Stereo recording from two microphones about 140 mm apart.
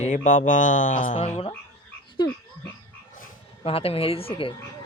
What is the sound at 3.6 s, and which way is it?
Speech, 45° left (ahead or behind).